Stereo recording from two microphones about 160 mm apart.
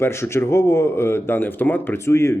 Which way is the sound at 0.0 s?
15° left (ahead or behind).